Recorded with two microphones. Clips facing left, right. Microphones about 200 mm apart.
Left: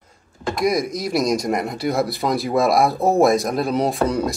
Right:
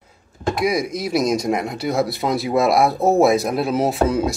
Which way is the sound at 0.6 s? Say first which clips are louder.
Left 1 dB; centre (ahead or behind).